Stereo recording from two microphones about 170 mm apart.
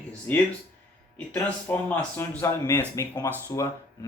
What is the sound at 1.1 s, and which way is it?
Speech, 10° left (ahead or behind).